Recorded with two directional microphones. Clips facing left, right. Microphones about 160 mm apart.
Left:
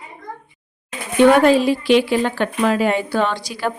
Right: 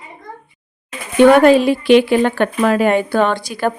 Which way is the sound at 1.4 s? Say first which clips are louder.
Right 4 dB; 60° right (ahead or behind).